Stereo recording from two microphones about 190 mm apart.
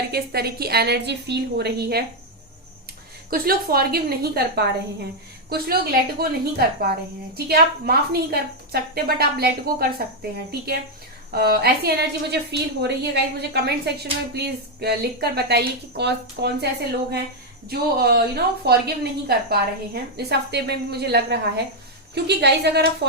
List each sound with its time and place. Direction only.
0.1 s a woman's voice: 55° right (ahead or behind)
3.2 s a woman's voice: 50° right (ahead or behind)
17.7 s a woman's voice: 55° right (ahead or behind)